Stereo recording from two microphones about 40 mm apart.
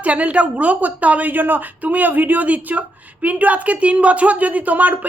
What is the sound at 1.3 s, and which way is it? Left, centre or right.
Speech, right.